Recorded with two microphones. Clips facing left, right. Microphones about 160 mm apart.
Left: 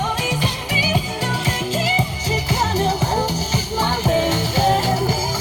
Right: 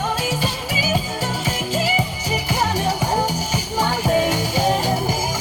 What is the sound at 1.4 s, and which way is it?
Music, 10° right (ahead or behind).